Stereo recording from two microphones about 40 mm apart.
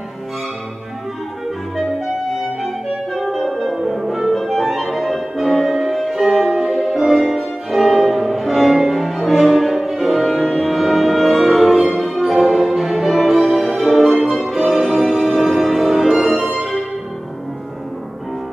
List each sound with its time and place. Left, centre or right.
3.2 s music: centre